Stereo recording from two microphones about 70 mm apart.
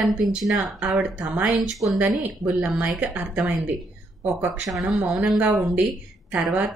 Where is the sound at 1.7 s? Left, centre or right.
Centre.